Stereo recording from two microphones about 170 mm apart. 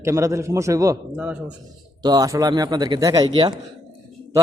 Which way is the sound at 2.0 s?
20° right (ahead or behind).